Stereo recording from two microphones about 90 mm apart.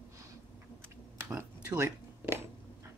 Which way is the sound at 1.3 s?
35° right (ahead or behind).